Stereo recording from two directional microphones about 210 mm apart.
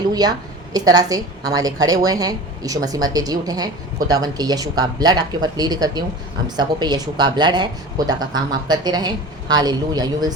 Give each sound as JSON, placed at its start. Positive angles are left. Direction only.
{"t": 0.1, "sound": "a woman's voice", "side_deg": -20}